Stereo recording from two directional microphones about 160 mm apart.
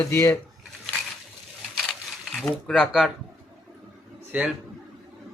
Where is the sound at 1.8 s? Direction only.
Centre (ahead or behind).